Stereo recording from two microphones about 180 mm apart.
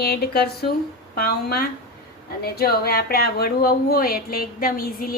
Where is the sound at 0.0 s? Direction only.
60° left (ahead or behind).